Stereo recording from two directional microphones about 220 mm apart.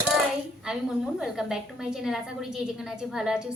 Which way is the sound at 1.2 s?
Centre (ahead or behind).